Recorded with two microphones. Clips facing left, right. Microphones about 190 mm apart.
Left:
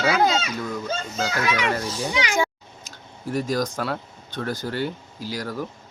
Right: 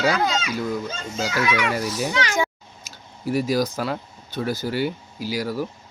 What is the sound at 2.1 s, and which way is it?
Speech, 15° left (ahead or behind).